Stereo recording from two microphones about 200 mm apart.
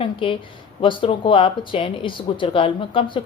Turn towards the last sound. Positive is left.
turn(degrees=25)  # may be behind; listen again after turning